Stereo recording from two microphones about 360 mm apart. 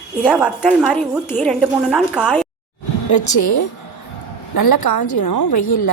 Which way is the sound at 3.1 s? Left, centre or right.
Left.